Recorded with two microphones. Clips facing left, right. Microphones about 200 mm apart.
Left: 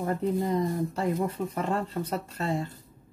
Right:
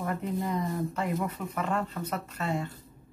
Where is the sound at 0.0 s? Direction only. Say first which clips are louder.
Left 4 dB; 35° left (ahead or behind).